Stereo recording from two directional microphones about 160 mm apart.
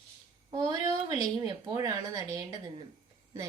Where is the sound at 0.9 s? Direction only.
25° right (ahead or behind).